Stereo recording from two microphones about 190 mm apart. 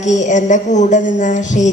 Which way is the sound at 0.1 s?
40° left (ahead or behind).